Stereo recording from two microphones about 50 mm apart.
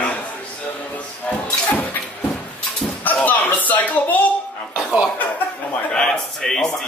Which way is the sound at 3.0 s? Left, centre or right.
Left.